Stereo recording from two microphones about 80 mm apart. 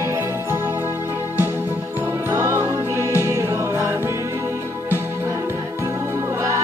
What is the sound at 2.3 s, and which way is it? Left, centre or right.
Music, right.